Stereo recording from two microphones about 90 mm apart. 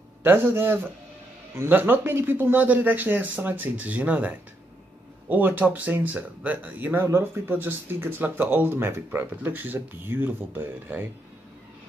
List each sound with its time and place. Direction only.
0.2 s speech: 25° right (ahead or behind)